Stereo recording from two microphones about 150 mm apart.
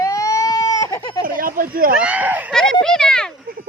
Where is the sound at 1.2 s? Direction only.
70° right (ahead or behind).